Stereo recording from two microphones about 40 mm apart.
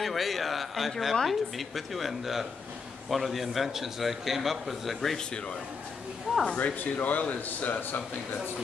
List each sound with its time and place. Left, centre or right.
0.0 s a man's voice: centre
6.3 s a sound: right
6.6 s speech: left